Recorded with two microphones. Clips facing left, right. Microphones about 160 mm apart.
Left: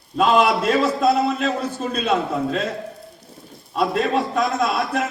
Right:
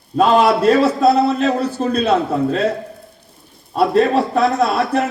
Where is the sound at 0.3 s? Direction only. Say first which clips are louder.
Right 5 dB; 40° right (ahead or behind).